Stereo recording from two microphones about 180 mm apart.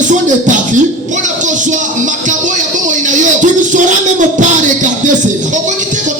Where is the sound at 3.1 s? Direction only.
45° right (ahead or behind).